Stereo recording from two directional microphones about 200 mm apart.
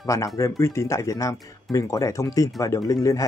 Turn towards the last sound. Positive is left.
turn(degrees=15)  # may be behind; listen again after turning